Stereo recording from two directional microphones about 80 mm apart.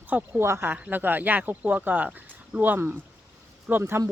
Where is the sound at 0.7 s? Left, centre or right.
Right.